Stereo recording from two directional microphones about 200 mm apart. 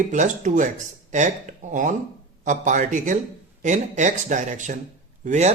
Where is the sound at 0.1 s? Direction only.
40° right (ahead or behind).